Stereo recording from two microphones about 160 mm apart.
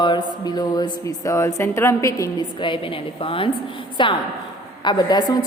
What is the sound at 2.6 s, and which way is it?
A woman's voice, 30° left (ahead or behind).